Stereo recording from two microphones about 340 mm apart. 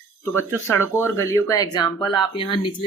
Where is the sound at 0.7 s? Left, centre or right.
Centre.